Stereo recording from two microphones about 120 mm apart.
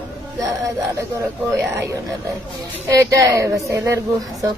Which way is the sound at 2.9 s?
25° right (ahead or behind).